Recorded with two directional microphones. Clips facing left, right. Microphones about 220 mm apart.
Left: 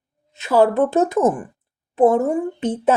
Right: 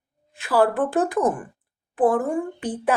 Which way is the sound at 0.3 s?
25° left (ahead or behind).